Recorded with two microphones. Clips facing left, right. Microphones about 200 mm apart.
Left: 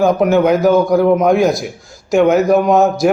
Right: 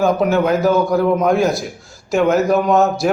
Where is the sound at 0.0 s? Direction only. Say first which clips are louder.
Left 3 dB; 15° left (ahead or behind).